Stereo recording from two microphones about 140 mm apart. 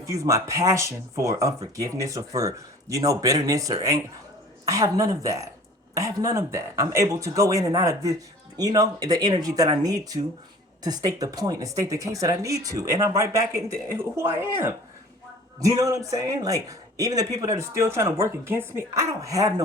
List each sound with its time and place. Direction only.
0.0 s a man's voice: 25° right (ahead or behind)